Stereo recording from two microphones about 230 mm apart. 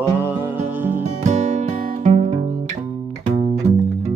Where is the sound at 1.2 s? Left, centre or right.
Right.